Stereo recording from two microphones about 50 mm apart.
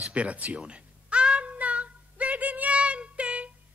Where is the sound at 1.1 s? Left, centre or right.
Right.